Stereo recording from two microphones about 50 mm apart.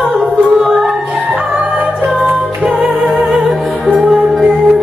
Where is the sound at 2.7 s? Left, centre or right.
Centre.